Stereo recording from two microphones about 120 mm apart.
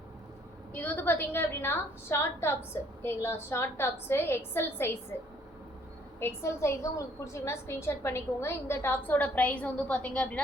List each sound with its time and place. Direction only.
0.7 s a woman's voice: 15° left (ahead or behind)
6.1 s a woman's voice: 20° left (ahead or behind)